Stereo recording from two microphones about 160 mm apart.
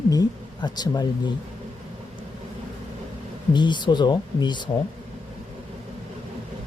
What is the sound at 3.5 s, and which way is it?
Speech, 30° left (ahead or behind).